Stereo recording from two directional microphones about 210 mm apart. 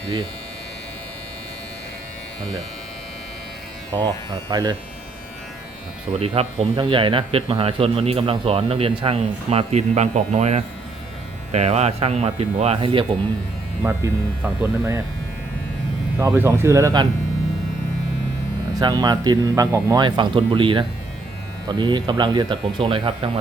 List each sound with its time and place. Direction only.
3.9 s speech: 20° right (ahead or behind)
6.1 s speech: 30° right (ahead or behind)
13.8 s speech: 10° right (ahead or behind)
16.1 s speech: 10° right (ahead or behind)
18.8 s speech: 20° right (ahead or behind)